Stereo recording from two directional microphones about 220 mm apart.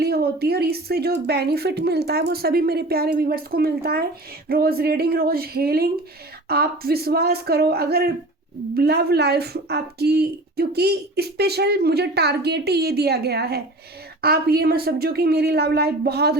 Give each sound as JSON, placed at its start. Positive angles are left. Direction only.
{"t": 0.0, "sound": "speech", "side_deg": -45}